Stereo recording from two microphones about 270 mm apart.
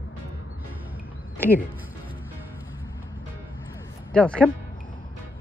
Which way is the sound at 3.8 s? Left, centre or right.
Centre.